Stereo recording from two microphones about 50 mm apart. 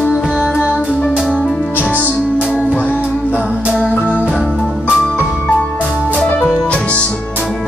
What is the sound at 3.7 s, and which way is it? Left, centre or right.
Organ, left.